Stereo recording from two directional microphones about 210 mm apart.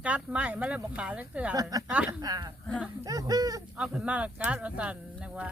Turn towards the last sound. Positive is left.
turn(degrees=-5)  # may be behind; listen again after turning